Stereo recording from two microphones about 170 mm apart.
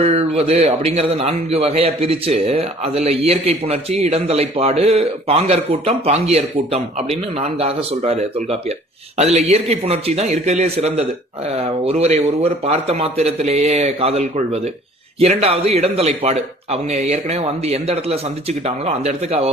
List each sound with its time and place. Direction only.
0.0 s a man's voice: 35° right (ahead or behind)